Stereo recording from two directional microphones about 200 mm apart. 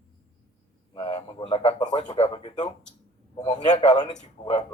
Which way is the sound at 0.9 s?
25° left (ahead or behind).